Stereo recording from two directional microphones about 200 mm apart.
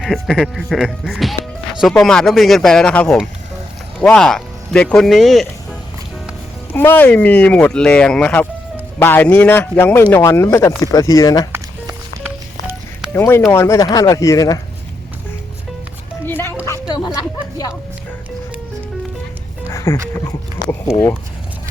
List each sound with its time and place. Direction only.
0.0 s speech: centre (ahead or behind)
6.7 s speech: 10° left (ahead or behind)
11.5 s music: 10° right (ahead or behind)
13.1 s speech: 10° left (ahead or behind)
16.2 s music: 10° left (ahead or behind)
19.7 s music: 15° left (ahead or behind)
20.7 s speech: 15° left (ahead or behind)